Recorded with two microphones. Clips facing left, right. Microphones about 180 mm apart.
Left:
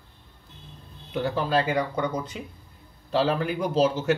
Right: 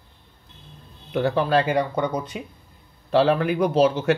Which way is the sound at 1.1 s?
65° right (ahead or behind).